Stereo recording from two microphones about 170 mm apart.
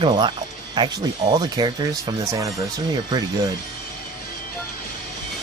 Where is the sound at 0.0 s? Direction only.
25° right (ahead or behind).